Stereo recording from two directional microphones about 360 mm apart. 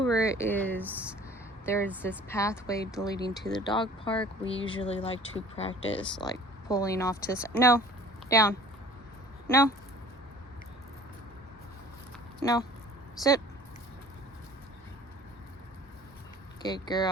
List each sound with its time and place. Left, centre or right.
0.0 s speech: centre
1.6 s speech: centre
12.4 s speech: centre
16.6 s speech: centre